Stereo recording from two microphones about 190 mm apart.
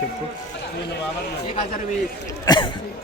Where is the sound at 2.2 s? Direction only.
25° left (ahead or behind).